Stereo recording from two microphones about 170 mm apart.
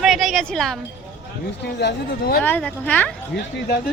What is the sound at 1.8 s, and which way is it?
Speech, 60° left (ahead or behind).